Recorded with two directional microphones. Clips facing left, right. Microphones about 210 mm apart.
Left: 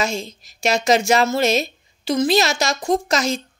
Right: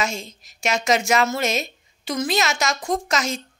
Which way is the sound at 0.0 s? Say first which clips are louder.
Left 3 dB; 35° left (ahead or behind).